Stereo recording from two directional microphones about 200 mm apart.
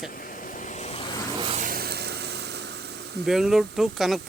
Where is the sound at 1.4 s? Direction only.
25° right (ahead or behind).